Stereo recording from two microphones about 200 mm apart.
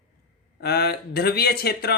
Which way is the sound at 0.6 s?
50° left (ahead or behind).